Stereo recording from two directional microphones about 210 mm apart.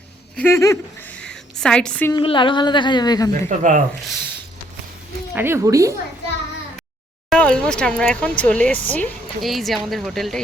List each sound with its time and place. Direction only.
0.3 s a woman's voice: 10° left (ahead or behind)
2.1 s a woman's voice: 25° left (ahead or behind)
3.6 s speech: 35° right (ahead or behind)
5.3 s speech: 10° right (ahead or behind)
7.3 s speech: 5° left (ahead or behind)